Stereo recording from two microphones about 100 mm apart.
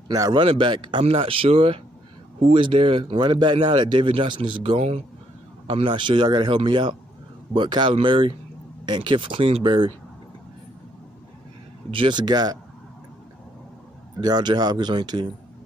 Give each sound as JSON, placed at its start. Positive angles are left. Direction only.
{"t": 0.3, "sound": "speech", "side_deg": -60}
{"t": 5.7, "sound": "speech", "side_deg": -60}
{"t": 9.7, "sound": "speech", "side_deg": -45}
{"t": 11.9, "sound": "speech", "side_deg": -55}
{"t": 14.2, "sound": "speech", "side_deg": -45}